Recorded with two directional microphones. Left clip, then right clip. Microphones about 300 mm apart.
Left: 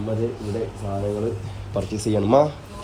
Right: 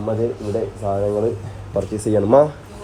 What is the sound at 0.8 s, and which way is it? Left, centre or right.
A man's voice, centre.